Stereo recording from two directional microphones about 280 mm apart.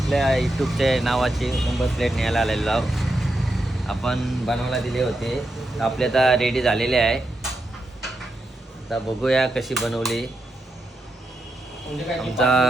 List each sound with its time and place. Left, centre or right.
0.0 s speech: centre
8.9 s speech: centre
12.2 s speech: centre